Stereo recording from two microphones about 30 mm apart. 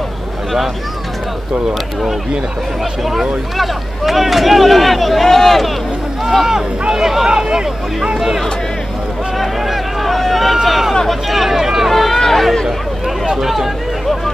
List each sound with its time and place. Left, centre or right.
3.0 s speech: centre
6.9 s speech: centre
7.2 s speech: right
9.4 s a sound: centre
11.1 s speech: centre
11.5 s speech: centre
11.9 s speech: centre
13.4 s speech: centre